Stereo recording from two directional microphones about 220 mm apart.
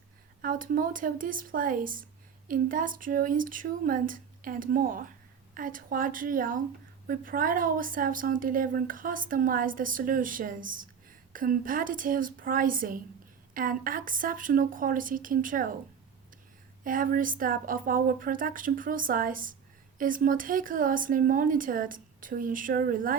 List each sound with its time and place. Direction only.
0.4 s a woman's voice: 40° right (ahead or behind)
16.8 s a woman's voice: 40° right (ahead or behind)